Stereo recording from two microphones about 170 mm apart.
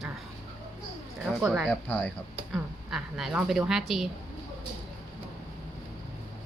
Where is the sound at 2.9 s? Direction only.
5° right (ahead or behind).